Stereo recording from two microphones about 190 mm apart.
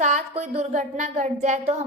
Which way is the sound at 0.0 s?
40° right (ahead or behind).